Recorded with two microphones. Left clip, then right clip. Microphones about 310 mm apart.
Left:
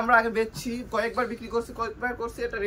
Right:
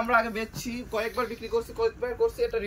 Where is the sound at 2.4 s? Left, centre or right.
Centre.